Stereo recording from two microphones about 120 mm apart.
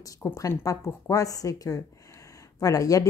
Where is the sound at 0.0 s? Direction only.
30° left (ahead or behind).